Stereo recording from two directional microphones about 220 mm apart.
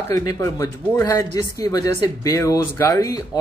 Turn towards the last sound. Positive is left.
turn(degrees=15)  # may be behind; listen again after turning